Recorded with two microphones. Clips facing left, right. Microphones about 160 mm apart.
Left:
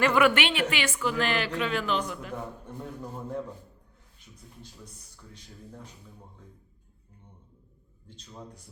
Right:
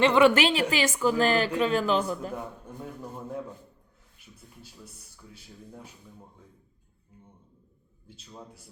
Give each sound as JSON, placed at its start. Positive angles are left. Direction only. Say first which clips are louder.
{"t": 0.0, "sound": "a woman's voice", "louder": "right 3 dB", "side_deg": -30}
{"t": 5.1, "sound": "speech", "louder": "right 1 dB", "side_deg": -5}
{"t": 8.0, "sound": "a man's voice", "louder": "left 1 dB", "side_deg": -5}